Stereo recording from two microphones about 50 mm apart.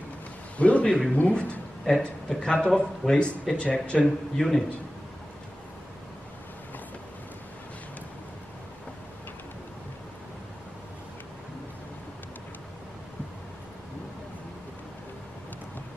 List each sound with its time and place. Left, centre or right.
0.6 s speech: left
1.9 s speech: centre
4.4 s speech: centre